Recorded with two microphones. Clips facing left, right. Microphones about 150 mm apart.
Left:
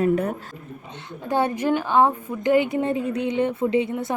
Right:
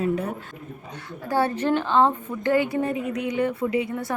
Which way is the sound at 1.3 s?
15° left (ahead or behind).